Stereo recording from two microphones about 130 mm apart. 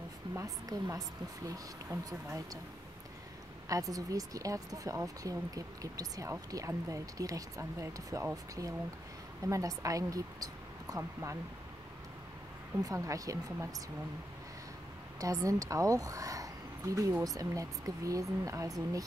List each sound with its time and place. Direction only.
0.3 s speech: 25° right (ahead or behind)
3.6 s speech: 25° right (ahead or behind)
9.4 s speech: 25° right (ahead or behind)
12.7 s speech: 25° right (ahead or behind)
15.1 s a woman's voice: 25° right (ahead or behind)